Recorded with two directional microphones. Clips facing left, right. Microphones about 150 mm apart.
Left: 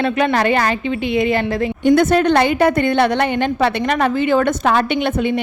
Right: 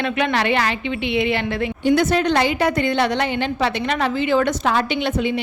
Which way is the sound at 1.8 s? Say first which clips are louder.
Left 4 dB; 50° left (ahead or behind).